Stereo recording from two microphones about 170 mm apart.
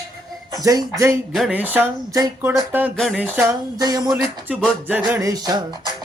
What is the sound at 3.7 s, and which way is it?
Speech, 20° right (ahead or behind).